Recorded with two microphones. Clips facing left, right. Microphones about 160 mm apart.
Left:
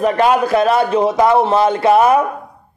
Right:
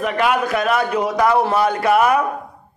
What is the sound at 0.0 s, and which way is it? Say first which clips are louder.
A man's voice: left 5 dB; 35° left (ahead or behind).